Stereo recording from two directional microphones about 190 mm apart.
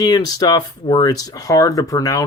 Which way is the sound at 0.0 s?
20° left (ahead or behind).